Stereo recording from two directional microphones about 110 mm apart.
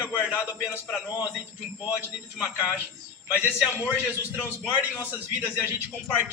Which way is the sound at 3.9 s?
20° left (ahead or behind).